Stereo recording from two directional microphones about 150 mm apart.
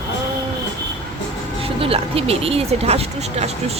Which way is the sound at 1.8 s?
40° right (ahead or behind).